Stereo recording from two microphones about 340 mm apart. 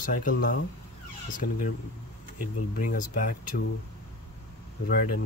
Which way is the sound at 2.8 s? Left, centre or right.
Left.